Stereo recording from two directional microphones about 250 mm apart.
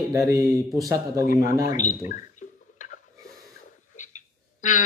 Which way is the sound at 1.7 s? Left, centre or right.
Left.